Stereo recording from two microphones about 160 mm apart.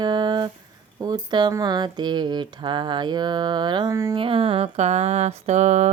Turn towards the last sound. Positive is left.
turn(degrees=-45)  # may be behind; listen again after turning